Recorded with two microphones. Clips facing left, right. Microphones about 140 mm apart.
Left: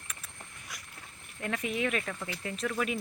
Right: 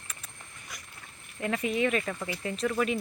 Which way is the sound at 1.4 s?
5° right (ahead or behind).